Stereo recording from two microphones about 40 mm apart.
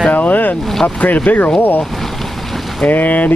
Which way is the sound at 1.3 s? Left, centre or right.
Left.